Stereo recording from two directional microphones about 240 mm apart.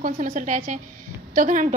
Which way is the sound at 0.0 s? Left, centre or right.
Right.